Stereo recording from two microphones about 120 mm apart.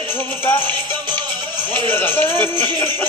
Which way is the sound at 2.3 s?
20° left (ahead or behind).